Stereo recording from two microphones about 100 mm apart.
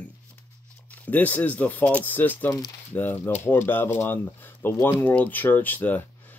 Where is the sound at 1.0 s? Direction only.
15° left (ahead or behind).